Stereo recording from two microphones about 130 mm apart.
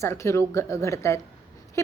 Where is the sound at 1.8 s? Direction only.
20° left (ahead or behind).